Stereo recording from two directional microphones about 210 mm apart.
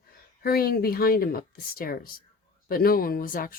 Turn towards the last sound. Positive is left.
turn(degrees=40)  # may be behind; listen again after turning